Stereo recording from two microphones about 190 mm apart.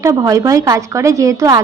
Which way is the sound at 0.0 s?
15° right (ahead or behind).